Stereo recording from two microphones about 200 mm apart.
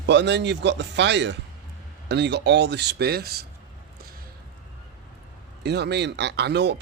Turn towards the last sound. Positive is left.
turn(degrees=-60)  # may be behind; listen again after turning